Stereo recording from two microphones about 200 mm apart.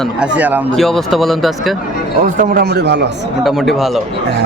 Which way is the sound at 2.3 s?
45° right (ahead or behind).